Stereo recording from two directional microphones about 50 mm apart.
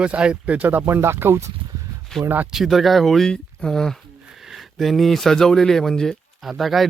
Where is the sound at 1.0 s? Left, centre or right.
Right.